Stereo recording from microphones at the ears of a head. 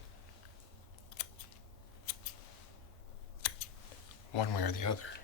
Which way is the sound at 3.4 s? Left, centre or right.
Left.